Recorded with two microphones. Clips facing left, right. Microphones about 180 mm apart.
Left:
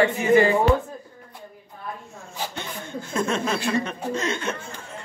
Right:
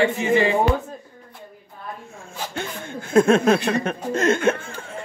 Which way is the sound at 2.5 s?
55° right (ahead or behind).